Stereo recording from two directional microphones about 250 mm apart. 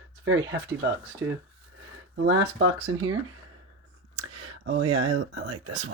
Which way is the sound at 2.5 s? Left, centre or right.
Right.